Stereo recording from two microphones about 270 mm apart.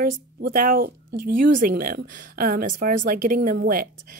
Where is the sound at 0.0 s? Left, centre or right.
Right.